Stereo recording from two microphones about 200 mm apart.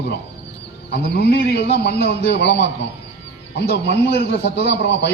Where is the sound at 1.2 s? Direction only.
50° left (ahead or behind).